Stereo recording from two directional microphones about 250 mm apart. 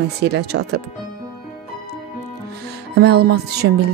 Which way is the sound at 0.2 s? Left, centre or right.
Right.